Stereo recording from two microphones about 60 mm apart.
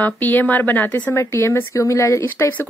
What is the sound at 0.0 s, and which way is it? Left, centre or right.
Speech, left.